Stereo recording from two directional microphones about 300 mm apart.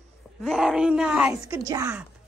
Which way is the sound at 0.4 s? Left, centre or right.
Centre.